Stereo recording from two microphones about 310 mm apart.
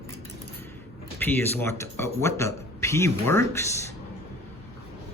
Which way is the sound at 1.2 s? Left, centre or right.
Centre.